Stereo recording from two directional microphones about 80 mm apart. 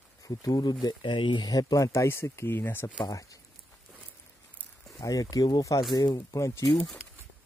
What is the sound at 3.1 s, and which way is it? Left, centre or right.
Speech, left.